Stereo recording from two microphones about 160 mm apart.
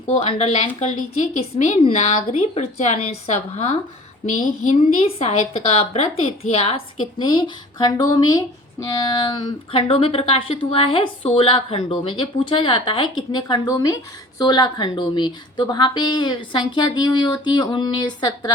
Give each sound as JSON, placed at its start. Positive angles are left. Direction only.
{"t": 0.1, "sound": "a woman's voice", "side_deg": 40}